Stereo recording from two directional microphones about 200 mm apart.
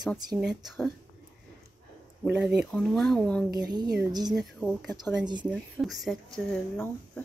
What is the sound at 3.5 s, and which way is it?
Speech, 20° right (ahead or behind).